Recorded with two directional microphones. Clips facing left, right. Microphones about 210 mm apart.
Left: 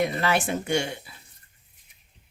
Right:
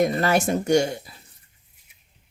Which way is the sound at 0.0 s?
40° right (ahead or behind).